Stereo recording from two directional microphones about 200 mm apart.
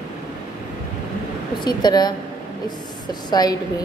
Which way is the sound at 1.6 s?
20° left (ahead or behind).